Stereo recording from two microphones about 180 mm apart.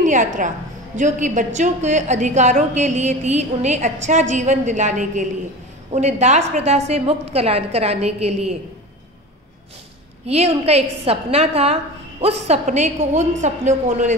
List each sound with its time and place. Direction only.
0.0 s a woman's voice: 45° right (ahead or behind)
10.2 s a woman's voice: 35° right (ahead or behind)